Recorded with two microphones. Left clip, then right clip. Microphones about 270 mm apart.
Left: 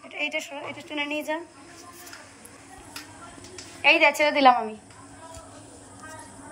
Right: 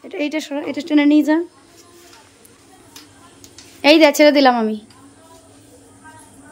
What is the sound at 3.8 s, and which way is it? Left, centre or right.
Speech, right.